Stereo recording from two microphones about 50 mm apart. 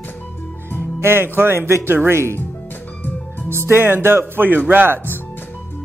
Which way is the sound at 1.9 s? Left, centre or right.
Right.